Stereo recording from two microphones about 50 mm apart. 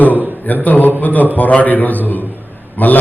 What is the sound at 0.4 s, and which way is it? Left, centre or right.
A man's voice, left.